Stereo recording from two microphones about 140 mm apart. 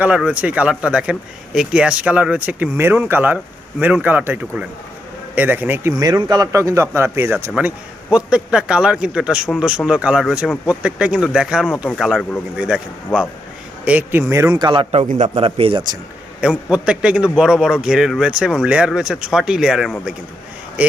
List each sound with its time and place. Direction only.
0.0 s speech: 10° right (ahead or behind)
6.0 s a man's voice: 30° right (ahead or behind); by 12.8 s 5° right (ahead or behind)
13.8 s speech: 15° right (ahead or behind); by 16.0 s 35° right (ahead or behind)
16.4 s a man's voice: 5° right (ahead or behind)